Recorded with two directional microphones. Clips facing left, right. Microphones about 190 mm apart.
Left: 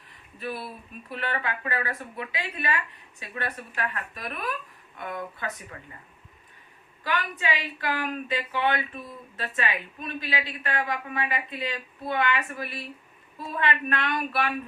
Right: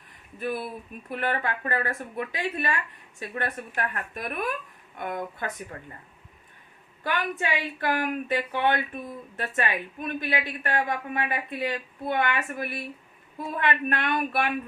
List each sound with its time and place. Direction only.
0.3 s a woman's voice: 50° right (ahead or behind)
7.0 s a woman's voice: 50° right (ahead or behind)